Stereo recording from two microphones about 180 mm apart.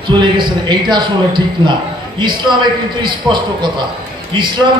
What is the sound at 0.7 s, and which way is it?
A man's voice, 25° right (ahead or behind).